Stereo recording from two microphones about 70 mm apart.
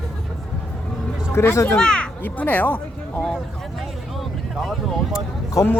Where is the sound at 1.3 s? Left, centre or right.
Left.